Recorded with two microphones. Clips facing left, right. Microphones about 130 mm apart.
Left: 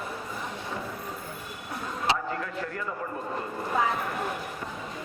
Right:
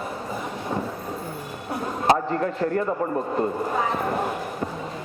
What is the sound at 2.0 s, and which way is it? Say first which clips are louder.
Speech: right 9 dB; 40° right (ahead or behind).